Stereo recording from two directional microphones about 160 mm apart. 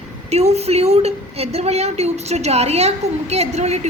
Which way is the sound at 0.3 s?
40° right (ahead or behind).